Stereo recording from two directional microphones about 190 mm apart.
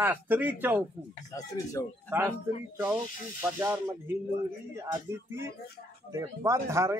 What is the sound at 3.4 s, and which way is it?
Speech, 10° right (ahead or behind).